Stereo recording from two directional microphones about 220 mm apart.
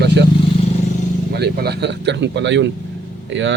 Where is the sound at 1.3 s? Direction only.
45° right (ahead or behind).